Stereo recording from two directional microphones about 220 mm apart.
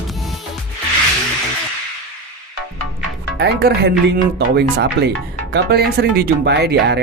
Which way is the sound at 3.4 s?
50° right (ahead or behind).